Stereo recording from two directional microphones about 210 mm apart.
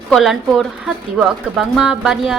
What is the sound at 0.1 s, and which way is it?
A woman's voice, centre (ahead or behind).